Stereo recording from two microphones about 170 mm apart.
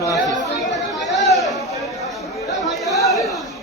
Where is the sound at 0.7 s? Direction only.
Centre (ahead or behind).